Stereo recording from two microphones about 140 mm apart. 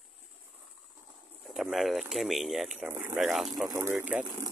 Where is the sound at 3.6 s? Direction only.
20° right (ahead or behind).